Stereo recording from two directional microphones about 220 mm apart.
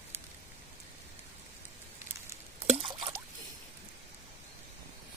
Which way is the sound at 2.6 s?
25° right (ahead or behind).